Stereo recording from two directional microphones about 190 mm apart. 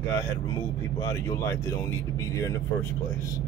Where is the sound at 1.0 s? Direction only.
15° left (ahead or behind).